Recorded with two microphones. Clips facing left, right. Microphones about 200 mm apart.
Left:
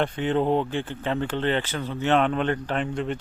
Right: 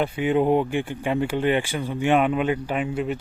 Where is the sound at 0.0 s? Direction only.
10° right (ahead or behind).